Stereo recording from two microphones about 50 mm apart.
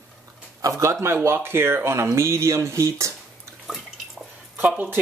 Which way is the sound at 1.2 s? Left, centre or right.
Right.